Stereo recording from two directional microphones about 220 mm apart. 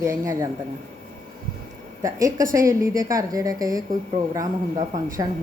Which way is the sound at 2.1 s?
15° right (ahead or behind).